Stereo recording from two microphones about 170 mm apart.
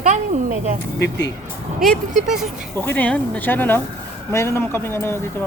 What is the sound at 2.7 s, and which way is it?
Speech, 10° left (ahead or behind).